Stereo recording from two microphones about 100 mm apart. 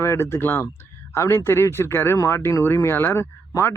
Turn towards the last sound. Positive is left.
turn(degrees=25)  # may be behind; listen again after turning